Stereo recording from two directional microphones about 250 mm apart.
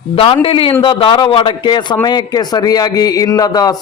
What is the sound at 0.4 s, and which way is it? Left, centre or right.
A man's voice, left.